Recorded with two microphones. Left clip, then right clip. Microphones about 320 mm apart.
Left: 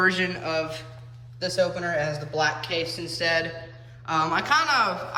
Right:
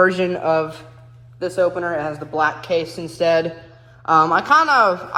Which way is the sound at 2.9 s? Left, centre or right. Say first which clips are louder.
Right 2 dB; right.